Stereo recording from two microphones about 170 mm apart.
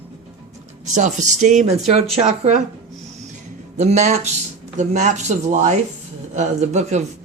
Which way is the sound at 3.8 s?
45° right (ahead or behind).